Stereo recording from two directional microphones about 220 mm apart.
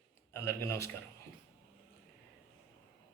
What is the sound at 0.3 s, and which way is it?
Speech, 10° left (ahead or behind).